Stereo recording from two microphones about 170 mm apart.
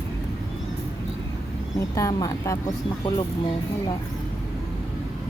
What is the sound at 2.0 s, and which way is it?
Speech, 20° left (ahead or behind).